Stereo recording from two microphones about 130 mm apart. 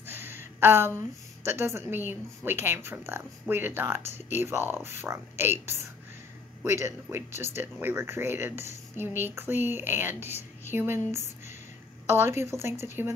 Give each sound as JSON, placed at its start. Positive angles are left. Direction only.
{"t": 0.0, "sound": "a woman's voice", "side_deg": -15}
{"t": 12.1, "sound": "a woman's voice", "side_deg": -20}